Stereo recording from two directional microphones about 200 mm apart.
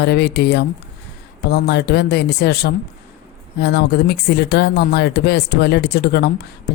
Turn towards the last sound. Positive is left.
turn(degrees=55)  # may be behind; listen again after turning